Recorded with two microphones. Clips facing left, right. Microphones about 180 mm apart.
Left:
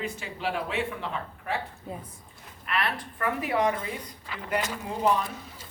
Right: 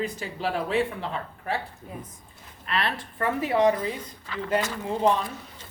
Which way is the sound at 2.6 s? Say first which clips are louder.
Right 1 dB; 30° right (ahead or behind).